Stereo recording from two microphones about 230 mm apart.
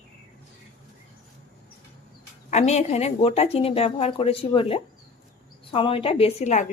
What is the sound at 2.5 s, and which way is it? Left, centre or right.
Speech, left.